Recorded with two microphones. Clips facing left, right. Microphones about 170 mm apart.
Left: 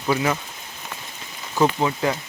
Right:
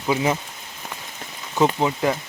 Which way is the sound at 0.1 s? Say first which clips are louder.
Right 1 dB; 20° right (ahead or behind).